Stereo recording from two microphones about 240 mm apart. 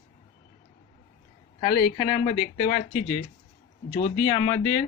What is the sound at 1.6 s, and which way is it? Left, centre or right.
Speech, left.